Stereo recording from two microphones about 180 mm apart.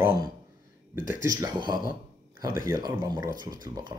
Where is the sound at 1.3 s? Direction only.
20° right (ahead or behind).